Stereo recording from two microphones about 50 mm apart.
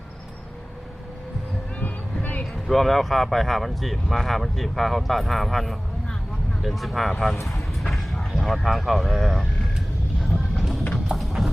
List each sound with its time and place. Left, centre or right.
1.8 s a sound: left
2.4 s speech: centre
10.6 s clip-clop: centre
11.1 s music: centre